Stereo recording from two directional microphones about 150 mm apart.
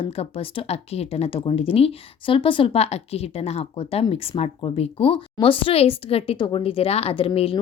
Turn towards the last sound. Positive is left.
turn(degrees=40)  # may be behind; listen again after turning